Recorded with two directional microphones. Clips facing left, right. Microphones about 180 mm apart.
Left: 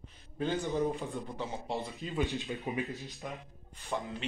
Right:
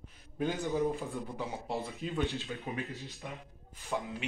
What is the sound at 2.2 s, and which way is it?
Speech, 15° left (ahead or behind).